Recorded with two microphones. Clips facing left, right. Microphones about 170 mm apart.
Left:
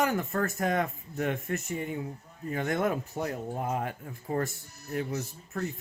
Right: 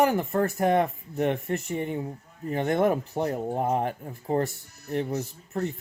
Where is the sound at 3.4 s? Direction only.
50° right (ahead or behind).